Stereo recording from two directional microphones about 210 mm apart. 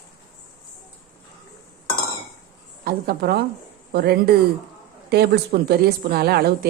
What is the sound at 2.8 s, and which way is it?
A woman's voice, 45° right (ahead or behind).